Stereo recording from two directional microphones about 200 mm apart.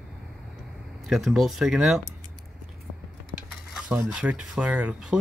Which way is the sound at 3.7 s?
Centre (ahead or behind).